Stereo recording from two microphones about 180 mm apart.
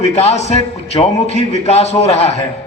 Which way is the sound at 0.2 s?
35° left (ahead or behind).